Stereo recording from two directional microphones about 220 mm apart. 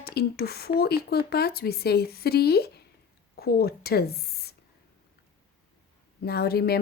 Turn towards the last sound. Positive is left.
turn(degrees=45)  # may be behind; listen again after turning